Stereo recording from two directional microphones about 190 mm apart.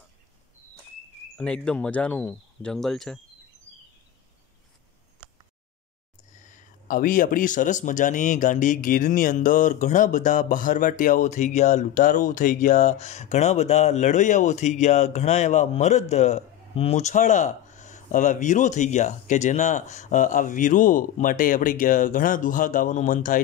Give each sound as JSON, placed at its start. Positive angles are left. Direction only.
{"t": 1.4, "sound": "speech", "side_deg": 5}
{"t": 6.4, "sound": "speech", "side_deg": 45}